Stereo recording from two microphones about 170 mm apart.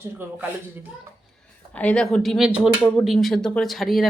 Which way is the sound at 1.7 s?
10° left (ahead or behind).